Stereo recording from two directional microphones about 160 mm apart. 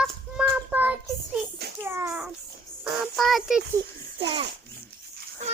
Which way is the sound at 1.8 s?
15° right (ahead or behind).